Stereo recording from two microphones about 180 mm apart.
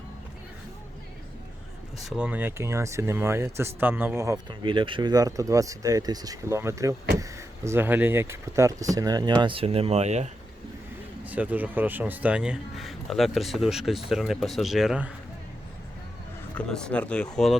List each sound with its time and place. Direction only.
2.0 s speech: 5° right (ahead or behind)
4.6 s speech: 25° right (ahead or behind)
11.3 s speech: 10° right (ahead or behind)
16.6 s speech: 5° left (ahead or behind)